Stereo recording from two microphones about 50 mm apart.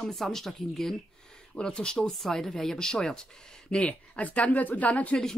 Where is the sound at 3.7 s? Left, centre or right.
Left.